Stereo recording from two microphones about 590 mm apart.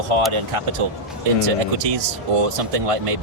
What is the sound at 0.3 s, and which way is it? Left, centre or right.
Speech, right.